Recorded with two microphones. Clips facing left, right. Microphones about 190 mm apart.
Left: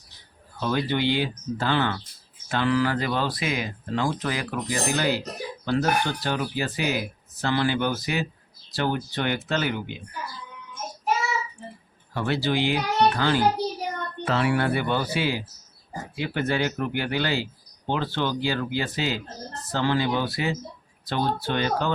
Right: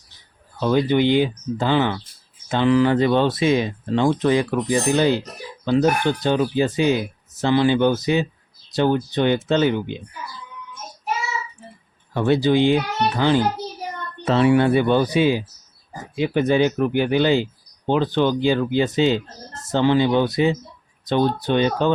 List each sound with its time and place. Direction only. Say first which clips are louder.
0.6 s speech: right 7 dB; 20° right (ahead or behind)
12.1 s speech: right 8 dB; 20° right (ahead or behind)